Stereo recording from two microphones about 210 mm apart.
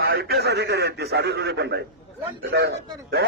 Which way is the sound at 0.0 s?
50° right (ahead or behind).